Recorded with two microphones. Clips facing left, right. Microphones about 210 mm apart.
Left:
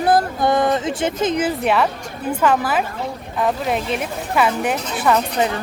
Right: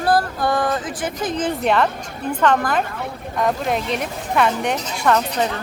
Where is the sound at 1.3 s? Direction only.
5° left (ahead or behind).